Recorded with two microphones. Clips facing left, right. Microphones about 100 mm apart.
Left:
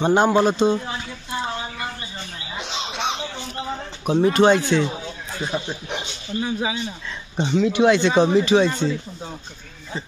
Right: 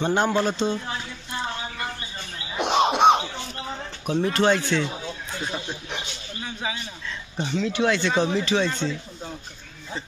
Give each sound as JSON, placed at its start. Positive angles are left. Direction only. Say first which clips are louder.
{"t": 0.0, "sound": "speech", "louder": "left 5 dB", "side_deg": 15}
{"t": 2.5, "sound": "music", "louder": "right 10 dB", "side_deg": -55}
{"t": 4.0, "sound": "speech", "louder": "left 6 dB", "side_deg": 15}